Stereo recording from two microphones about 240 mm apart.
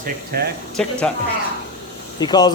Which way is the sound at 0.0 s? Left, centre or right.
Right.